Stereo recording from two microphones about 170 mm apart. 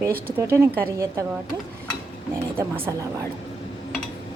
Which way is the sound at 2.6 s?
15° right (ahead or behind).